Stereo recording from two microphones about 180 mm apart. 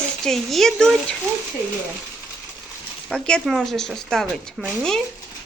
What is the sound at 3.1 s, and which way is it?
Speech, 5° left (ahead or behind).